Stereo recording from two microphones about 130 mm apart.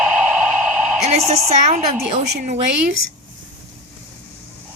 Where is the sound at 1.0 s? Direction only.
60° right (ahead or behind).